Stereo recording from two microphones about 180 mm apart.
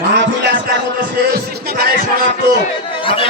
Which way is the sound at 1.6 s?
55° right (ahead or behind).